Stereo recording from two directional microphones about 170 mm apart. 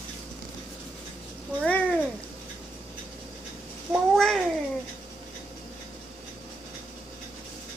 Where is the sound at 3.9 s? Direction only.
Centre (ahead or behind).